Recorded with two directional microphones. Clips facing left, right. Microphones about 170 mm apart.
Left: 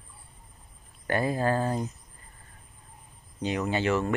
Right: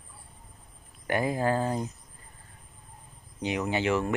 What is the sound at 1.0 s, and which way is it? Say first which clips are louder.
Speech: even; 15° right (ahead or behind).